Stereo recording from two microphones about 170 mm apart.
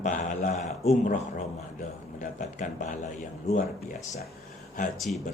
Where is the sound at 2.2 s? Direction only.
45° left (ahead or behind).